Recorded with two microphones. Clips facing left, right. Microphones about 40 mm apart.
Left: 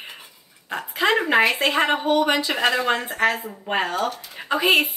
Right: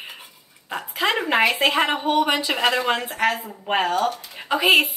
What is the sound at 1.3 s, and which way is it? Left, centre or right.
Speech, centre.